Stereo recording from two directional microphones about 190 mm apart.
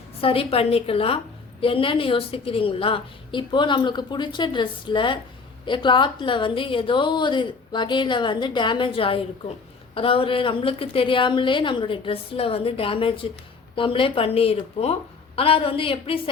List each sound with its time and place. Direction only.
0.2 s a woman's voice: 30° left (ahead or behind)